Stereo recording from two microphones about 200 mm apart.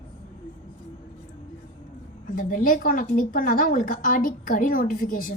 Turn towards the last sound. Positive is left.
turn(degrees=45)  # may be behind; listen again after turning